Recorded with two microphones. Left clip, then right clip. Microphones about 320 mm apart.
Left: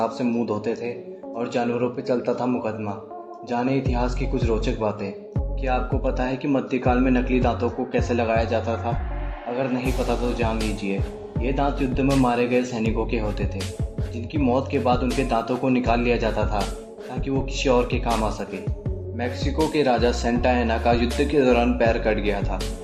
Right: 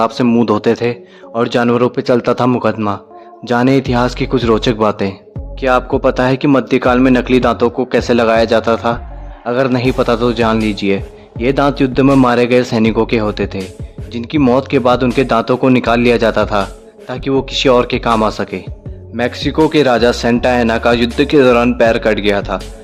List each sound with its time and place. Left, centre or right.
0.0 s a man's voice: right
19.7 s speech: right